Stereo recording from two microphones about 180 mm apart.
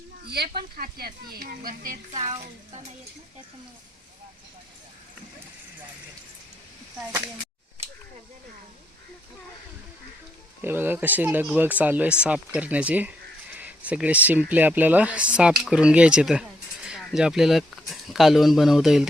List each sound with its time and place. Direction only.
0.3 s speech: 60° right (ahead or behind); by 2.3 s 45° right (ahead or behind)
10.6 s speech: 10° right (ahead or behind)